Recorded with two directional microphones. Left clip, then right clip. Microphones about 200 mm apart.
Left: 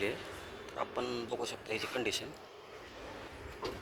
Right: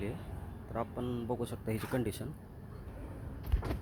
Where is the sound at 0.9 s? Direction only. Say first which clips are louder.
Left 1 dB; 15° right (ahead or behind).